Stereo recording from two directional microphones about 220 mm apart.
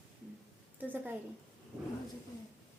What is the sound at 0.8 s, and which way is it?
Speech, 10° right (ahead or behind).